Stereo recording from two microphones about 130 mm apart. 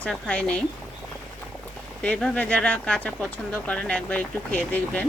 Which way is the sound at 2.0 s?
10° left (ahead or behind).